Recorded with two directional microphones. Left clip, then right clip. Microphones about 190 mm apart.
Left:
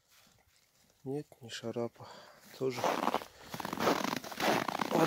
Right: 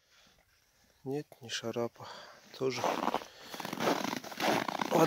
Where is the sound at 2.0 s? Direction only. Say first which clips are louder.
Right 4 dB; centre (ahead or behind).